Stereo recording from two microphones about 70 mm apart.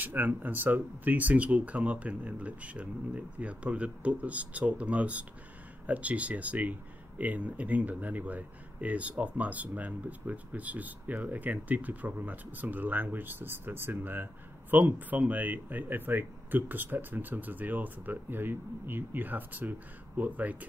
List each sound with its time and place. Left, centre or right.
0.0 s speech: right